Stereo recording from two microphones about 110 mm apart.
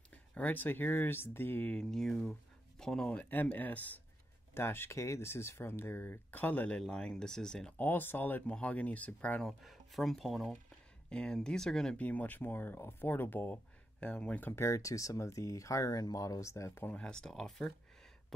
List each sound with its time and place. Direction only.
0.1 s speech: 10° left (ahead or behind)
1.8 s speech: 5° left (ahead or behind)
9.5 s speech: centre (ahead or behind)
14.5 s speech: 25° left (ahead or behind)
16.9 s speech: 5° left (ahead or behind)